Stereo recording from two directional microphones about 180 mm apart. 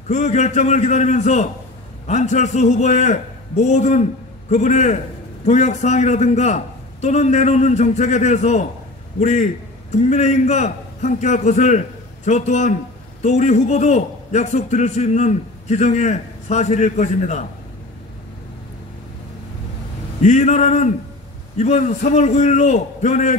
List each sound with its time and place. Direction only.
0.1 s a man's voice: 40° left (ahead or behind)
20.2 s a man's voice: 40° left (ahead or behind)